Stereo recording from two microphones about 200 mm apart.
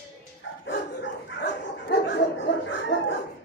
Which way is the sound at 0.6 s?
60° left (ahead or behind).